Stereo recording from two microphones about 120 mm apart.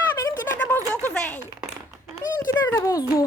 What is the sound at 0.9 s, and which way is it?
Speech, 10° left (ahead or behind).